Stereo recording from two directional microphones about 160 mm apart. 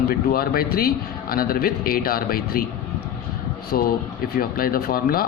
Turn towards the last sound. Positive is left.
turn(degrees=65)  # may be behind; listen again after turning